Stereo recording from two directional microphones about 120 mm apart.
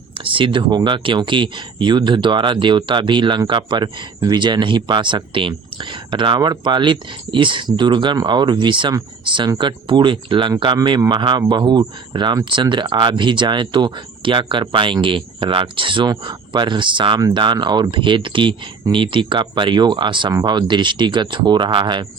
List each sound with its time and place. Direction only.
0.1 s speech: 45° right (ahead or behind)